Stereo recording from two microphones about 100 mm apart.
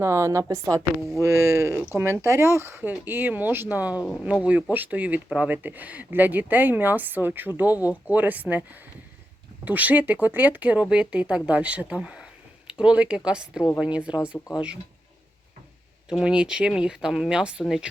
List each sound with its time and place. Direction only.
0.0 s speech: 30° right (ahead or behind)
9.6 s speech: 15° right (ahead or behind)
16.0 s speech: 10° right (ahead or behind)